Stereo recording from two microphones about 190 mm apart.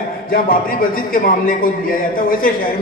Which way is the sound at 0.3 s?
50° left (ahead or behind).